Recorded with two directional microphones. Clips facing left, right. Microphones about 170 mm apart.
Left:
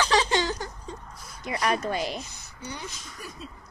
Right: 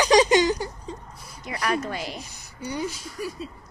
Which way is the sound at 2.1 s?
10° right (ahead or behind).